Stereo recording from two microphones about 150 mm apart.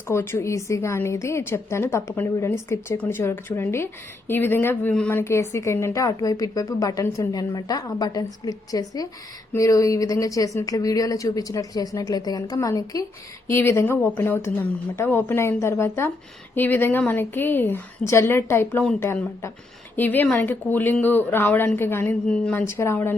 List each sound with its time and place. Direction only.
0.1 s a woman's voice: 15° left (ahead or behind)
19.0 s a woman's voice: 20° left (ahead or behind)
22.5 s a woman's voice: 20° left (ahead or behind)